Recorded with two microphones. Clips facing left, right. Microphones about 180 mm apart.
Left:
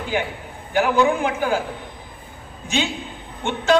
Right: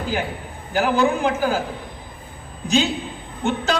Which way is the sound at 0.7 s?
40° right (ahead or behind).